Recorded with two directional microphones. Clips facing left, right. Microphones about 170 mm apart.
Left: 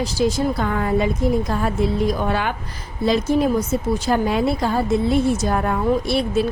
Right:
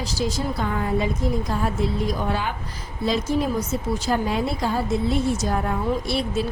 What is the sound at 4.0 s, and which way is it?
A woman's voice, 65° left (ahead or behind).